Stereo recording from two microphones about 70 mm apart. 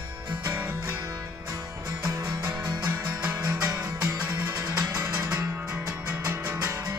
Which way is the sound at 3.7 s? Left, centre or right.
Right.